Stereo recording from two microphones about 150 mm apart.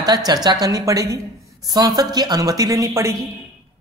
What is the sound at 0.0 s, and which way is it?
A woman's voice, 25° right (ahead or behind).